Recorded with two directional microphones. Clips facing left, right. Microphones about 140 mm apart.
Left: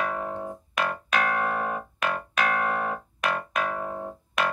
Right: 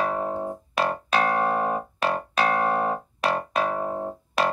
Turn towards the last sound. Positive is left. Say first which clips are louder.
# right 3 dB
turn(degrees=-30)  # may be behind; listen again after turning